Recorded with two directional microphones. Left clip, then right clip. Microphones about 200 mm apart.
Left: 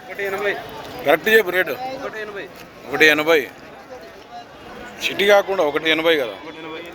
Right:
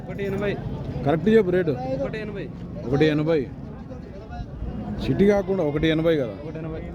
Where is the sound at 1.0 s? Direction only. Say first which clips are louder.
Left 5 dB; centre (ahead or behind).